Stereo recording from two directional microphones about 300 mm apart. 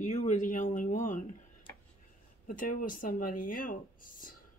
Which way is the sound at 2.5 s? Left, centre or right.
Left.